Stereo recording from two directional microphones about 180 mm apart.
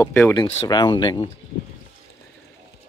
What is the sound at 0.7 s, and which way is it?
Speech, 25° left (ahead or behind).